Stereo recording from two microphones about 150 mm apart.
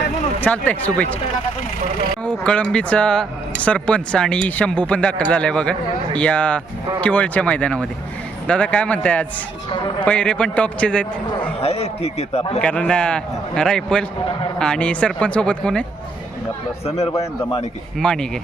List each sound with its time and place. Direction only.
0.4 s speech: 10° left (ahead or behind)
2.2 s speech: 10° left (ahead or behind)
11.6 s a man's voice: 45° left (ahead or behind)
12.6 s speech: 10° left (ahead or behind)
18.0 s speech: 5° left (ahead or behind)